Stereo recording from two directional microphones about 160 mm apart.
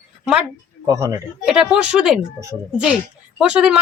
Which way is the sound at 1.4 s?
5° right (ahead or behind).